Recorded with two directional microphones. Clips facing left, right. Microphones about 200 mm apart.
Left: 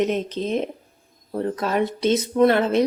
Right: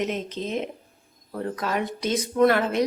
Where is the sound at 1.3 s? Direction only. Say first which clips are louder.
Left 4 dB; 30° left (ahead or behind).